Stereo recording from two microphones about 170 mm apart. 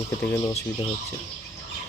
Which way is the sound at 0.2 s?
15° left (ahead or behind).